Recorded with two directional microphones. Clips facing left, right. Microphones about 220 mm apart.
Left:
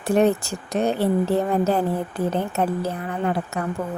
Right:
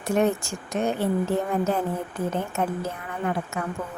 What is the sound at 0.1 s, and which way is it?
A woman's voice, 35° left (ahead or behind).